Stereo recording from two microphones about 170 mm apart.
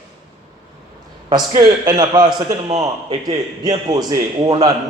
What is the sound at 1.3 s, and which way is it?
A man's voice, 25° right (ahead or behind).